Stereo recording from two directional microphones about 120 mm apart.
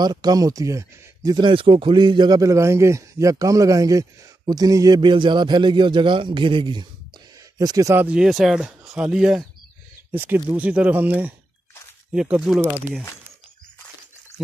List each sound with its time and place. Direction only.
0.0 s speech: 35° right (ahead or behind)
7.5 s speech: 30° right (ahead or behind)
8.0 s speech: 10° right (ahead or behind)
10.1 s speech: 15° right (ahead or behind)